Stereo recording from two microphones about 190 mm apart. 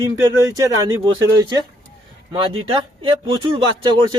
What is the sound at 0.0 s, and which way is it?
Speech, 15° right (ahead or behind).